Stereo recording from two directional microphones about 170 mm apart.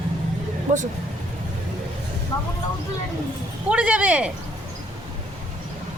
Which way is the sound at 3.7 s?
5° right (ahead or behind).